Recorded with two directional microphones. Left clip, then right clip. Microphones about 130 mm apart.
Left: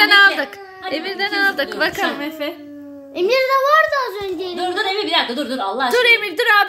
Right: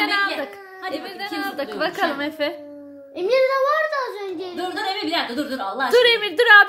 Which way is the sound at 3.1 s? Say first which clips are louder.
Left 3 dB; 40° left (ahead or behind).